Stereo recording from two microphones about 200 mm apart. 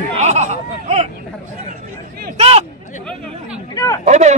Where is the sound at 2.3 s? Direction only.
30° right (ahead or behind).